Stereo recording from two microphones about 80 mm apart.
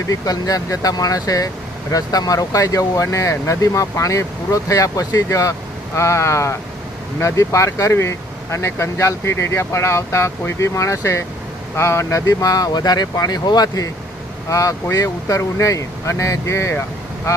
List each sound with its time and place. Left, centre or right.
0.1 s speech: left
14.5 s speech: left